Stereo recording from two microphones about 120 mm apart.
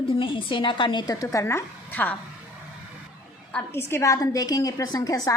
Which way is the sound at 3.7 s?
25° left (ahead or behind).